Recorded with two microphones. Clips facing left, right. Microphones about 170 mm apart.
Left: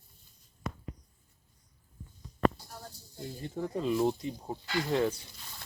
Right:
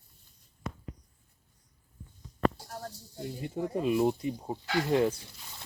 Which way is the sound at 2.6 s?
70° right (ahead or behind).